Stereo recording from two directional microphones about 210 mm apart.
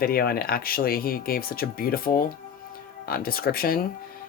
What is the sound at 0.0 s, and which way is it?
Speech, 45° left (ahead or behind).